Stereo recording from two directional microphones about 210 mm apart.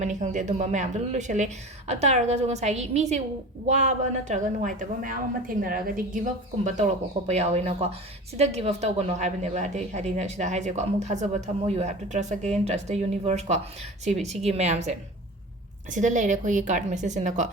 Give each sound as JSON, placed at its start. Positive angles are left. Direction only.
{"t": 0.0, "sound": "speech", "side_deg": -35}